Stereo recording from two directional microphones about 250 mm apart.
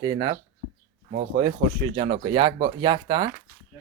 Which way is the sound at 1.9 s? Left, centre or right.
Right.